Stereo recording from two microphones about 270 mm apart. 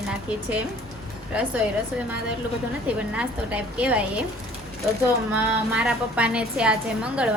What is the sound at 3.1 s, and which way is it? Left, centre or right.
Speech, centre.